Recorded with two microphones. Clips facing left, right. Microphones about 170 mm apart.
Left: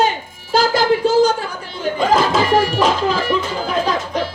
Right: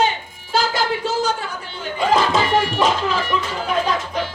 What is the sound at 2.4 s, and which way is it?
Music, 40° left (ahead or behind).